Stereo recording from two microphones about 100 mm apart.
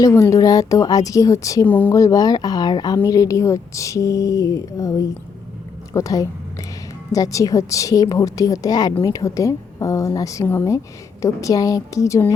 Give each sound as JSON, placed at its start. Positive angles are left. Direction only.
{"t": 0.0, "sound": "speech", "side_deg": 30}
{"t": 1.6, "sound": "speech", "side_deg": 15}
{"t": 1.9, "sound": "speech", "side_deg": 35}